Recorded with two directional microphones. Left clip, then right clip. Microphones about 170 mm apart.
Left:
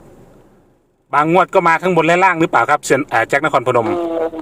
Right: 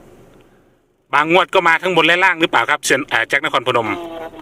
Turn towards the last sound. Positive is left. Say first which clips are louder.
# left 10 dB
turn(degrees=55)  # may be behind; listen again after turning